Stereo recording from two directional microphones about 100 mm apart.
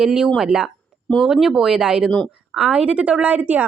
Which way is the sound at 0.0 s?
5° right (ahead or behind).